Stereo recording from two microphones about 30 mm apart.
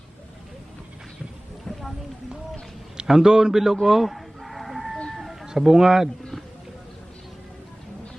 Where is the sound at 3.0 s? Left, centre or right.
Centre.